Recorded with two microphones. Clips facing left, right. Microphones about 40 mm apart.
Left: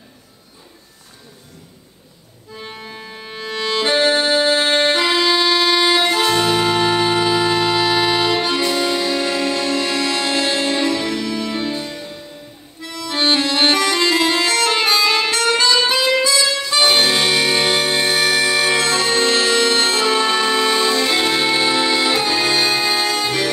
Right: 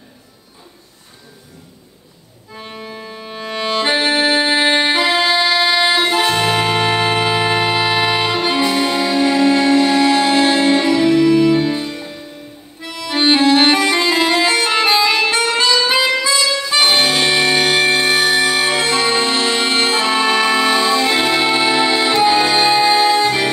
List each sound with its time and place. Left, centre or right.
2.6 s organ: centre
3.3 s music: centre
11.9 s music: centre
12.8 s accordion: right
14.7 s music: centre
16.3 s music: centre
16.6 s music: centre
22.2 s accordion: centre